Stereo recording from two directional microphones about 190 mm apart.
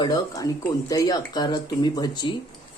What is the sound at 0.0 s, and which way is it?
Speech, 20° left (ahead or behind).